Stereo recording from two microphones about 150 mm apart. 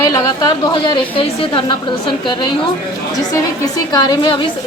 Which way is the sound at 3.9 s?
25° left (ahead or behind).